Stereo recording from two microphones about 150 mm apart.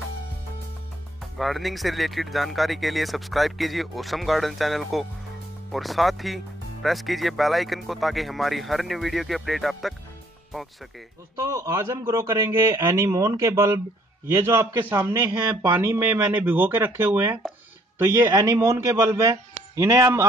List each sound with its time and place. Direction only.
1.2 s speech: centre (ahead or behind)
11.4 s a man's voice: 20° right (ahead or behind)